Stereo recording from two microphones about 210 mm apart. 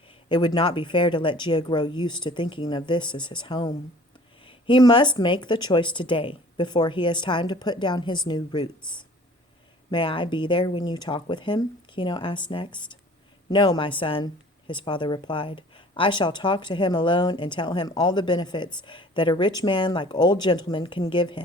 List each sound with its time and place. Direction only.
0.1 s speech: 20° left (ahead or behind)
9.9 s speech: 25° left (ahead or behind)